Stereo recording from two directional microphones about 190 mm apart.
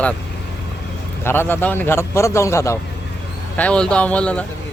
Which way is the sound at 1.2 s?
10° left (ahead or behind).